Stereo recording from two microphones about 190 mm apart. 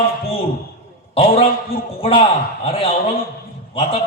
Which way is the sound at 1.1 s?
30° left (ahead or behind).